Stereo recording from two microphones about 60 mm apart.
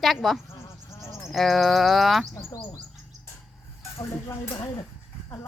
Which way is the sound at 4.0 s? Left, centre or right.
Left.